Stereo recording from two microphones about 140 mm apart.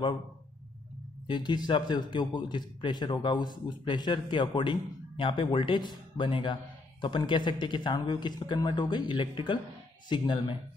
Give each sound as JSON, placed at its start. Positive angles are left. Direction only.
{"t": 1.2, "sound": "speech", "side_deg": 35}